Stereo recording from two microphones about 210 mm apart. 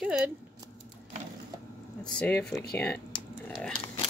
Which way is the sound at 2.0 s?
5° left (ahead or behind).